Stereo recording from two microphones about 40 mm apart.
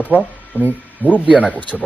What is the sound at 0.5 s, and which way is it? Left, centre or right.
Speech, left.